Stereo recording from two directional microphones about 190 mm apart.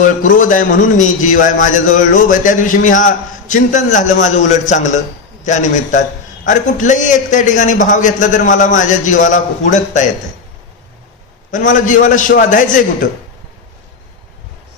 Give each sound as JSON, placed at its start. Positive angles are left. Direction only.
{"t": 0.0, "sound": "a man's voice", "side_deg": 45}
{"t": 11.5, "sound": "a man's voice", "side_deg": 45}